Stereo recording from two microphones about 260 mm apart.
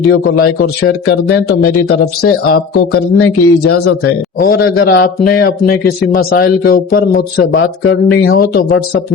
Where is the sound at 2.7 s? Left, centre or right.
Left.